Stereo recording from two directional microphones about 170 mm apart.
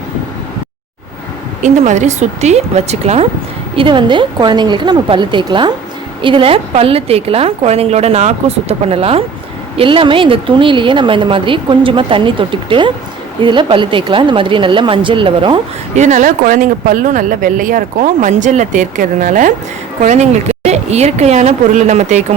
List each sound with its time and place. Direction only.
1.6 s a woman's voice: 45° right (ahead or behind)
3.8 s a woman's voice: 30° right (ahead or behind)
16.0 s a woman's voice: 45° right (ahead or behind)